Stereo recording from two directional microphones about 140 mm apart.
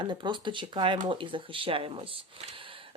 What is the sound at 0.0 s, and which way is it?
Speech, 35° right (ahead or behind).